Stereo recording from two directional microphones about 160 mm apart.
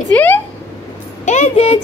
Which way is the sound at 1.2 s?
45° left (ahead or behind).